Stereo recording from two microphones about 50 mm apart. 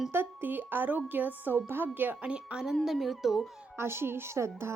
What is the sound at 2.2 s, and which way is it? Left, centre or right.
Speech, right.